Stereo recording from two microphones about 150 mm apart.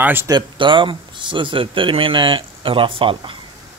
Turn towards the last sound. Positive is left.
turn(degrees=-35)  # may be behind; listen again after turning